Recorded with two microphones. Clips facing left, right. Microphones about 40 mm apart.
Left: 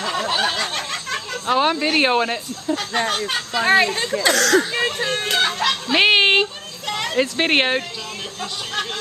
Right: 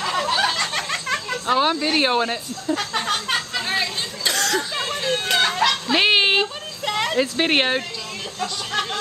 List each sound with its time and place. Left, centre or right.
0.0 s a sound: centre
1.5 s speech: centre
2.6 s speech: centre
3.8 s speech: left
4.7 s speech: centre
5.3 s speech: centre
6.4 s a sound: centre
7.2 s speech: centre